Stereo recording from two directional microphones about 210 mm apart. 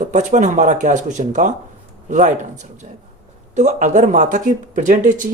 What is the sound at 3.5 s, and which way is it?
Speech, 35° right (ahead or behind).